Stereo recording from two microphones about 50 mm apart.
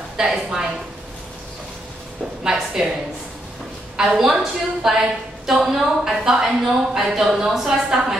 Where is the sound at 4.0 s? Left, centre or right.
Centre.